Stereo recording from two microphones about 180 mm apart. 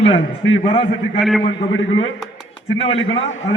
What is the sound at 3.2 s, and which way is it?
Speech, 90° left.